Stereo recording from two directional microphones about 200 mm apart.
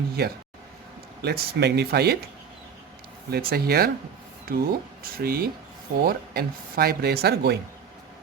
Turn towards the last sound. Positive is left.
turn(degrees=-55)  # may be behind; listen again after turning